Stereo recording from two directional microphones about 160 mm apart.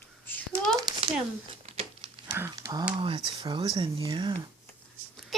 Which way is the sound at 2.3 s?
15° right (ahead or behind).